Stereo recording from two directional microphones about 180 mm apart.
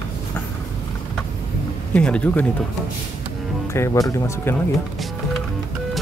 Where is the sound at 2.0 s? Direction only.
5° left (ahead or behind).